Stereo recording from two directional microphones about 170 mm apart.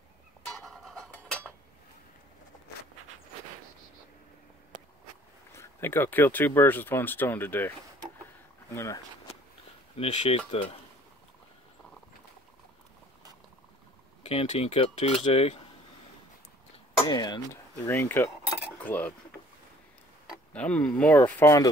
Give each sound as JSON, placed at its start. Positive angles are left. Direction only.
{"t": 0.5, "sound": "a sound", "side_deg": 5}
{"t": 5.5, "sound": "speech", "side_deg": 15}
{"t": 8.7, "sound": "speech", "side_deg": 15}
{"t": 9.9, "sound": "speech", "side_deg": 40}
{"t": 14.2, "sound": "speech", "side_deg": 35}
{"t": 17.0, "sound": "speech", "side_deg": 25}
{"t": 17.8, "sound": "speech", "side_deg": 10}
{"t": 20.5, "sound": "speech", "side_deg": 5}